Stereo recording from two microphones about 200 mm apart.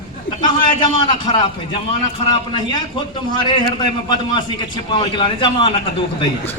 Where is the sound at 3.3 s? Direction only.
25° left (ahead or behind).